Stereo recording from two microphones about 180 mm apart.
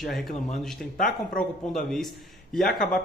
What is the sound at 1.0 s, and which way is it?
Speech, 45° left (ahead or behind).